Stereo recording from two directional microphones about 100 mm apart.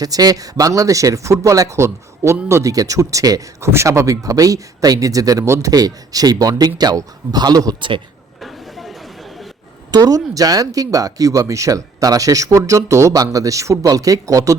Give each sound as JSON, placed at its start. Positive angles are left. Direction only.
{"t": 0.0, "sound": "speech", "side_deg": -40}
{"t": 7.8, "sound": "speech", "side_deg": -55}
{"t": 8.4, "sound": "a sound", "side_deg": 0}
{"t": 9.9, "sound": "speech", "side_deg": -40}